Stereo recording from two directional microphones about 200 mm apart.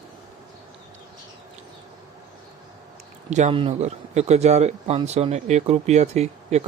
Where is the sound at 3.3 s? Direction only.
35° right (ahead or behind).